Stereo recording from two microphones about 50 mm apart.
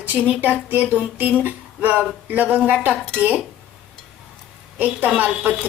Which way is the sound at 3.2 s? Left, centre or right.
Right.